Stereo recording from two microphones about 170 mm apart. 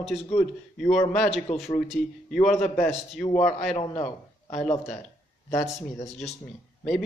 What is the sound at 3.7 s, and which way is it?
Speech, 40° left (ahead or behind).